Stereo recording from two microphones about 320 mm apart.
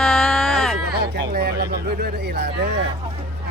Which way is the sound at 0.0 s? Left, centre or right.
Centre.